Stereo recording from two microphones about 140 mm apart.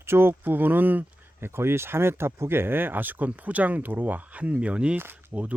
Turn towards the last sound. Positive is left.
turn(degrees=-10)  # may be behind; listen again after turning